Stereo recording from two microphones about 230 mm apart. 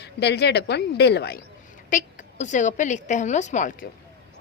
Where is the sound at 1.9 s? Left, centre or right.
Left.